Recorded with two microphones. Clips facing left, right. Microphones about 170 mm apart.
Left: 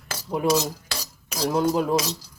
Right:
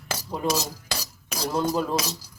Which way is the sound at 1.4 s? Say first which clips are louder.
Left 3 dB; 15° left (ahead or behind).